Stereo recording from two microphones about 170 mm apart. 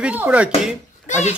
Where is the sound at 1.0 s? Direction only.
45° left (ahead or behind).